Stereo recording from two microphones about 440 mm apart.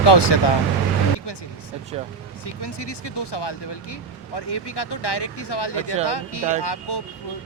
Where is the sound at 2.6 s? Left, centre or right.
Left.